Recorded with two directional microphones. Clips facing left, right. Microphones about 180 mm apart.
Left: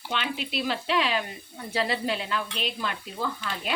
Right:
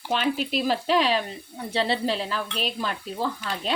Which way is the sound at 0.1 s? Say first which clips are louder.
Right 6 dB; 40° right (ahead or behind).